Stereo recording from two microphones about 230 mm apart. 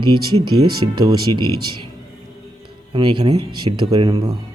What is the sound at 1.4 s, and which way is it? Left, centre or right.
Speech, right.